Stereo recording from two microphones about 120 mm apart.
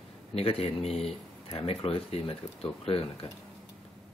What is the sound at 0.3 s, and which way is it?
Speech, 55° left (ahead or behind).